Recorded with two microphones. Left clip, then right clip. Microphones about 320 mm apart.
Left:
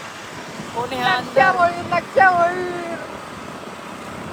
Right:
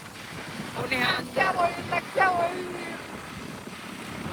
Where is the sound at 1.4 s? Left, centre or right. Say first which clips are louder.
Left 5 dB; left.